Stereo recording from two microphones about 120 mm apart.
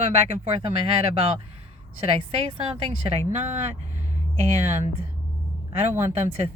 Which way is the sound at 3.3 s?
70° right (ahead or behind).